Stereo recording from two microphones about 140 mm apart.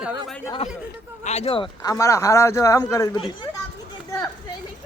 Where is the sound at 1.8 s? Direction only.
25° left (ahead or behind).